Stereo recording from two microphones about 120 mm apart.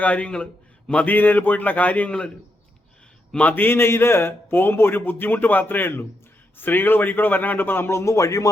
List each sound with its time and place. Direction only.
0.0 s a man's voice: 10° left (ahead or behind)
3.3 s a man's voice: 15° left (ahead or behind)